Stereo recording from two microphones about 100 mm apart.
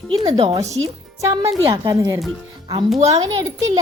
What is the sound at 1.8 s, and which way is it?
Speech, 35° right (ahead or behind).